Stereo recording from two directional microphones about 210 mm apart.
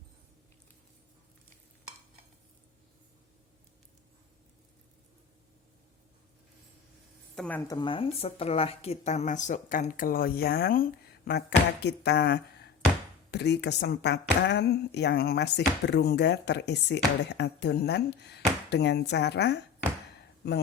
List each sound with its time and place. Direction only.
7.3 s speech: 5° left (ahead or behind)
7.7 s speech: 25° left (ahead or behind); by 19.5 s 55° left (ahead or behind)